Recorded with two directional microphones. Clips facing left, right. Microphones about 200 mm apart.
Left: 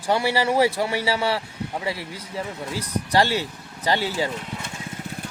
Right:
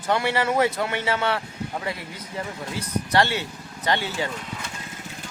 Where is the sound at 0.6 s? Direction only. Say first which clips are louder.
Left 2 dB; 30° left (ahead or behind).